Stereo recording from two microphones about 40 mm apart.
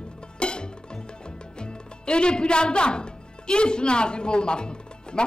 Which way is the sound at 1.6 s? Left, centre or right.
Left.